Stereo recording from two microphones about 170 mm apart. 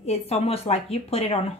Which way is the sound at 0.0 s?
40° left (ahead or behind).